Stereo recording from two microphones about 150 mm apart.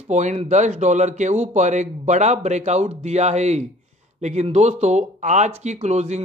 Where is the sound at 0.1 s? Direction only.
50° right (ahead or behind).